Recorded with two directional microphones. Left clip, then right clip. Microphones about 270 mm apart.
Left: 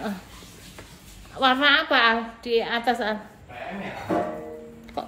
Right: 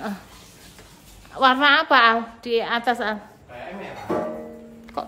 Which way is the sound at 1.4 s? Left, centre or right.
Centre.